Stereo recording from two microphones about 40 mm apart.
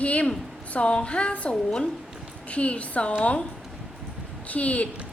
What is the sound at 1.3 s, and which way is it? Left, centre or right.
Speech, left.